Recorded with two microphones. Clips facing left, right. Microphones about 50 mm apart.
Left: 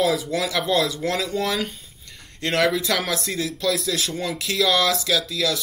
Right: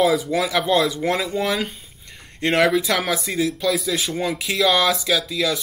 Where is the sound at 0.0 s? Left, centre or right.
Centre.